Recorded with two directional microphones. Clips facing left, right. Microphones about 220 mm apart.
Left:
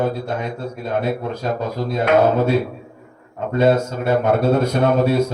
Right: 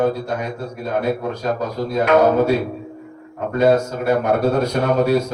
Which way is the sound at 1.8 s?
25° left (ahead or behind).